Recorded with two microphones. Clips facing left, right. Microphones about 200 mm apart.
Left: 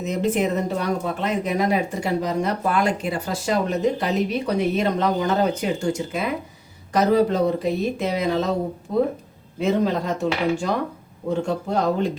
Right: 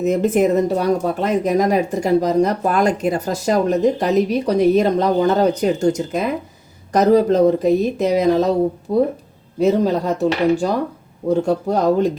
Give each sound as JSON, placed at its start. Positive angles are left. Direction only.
{"t": 0.0, "sound": "speech", "side_deg": -50}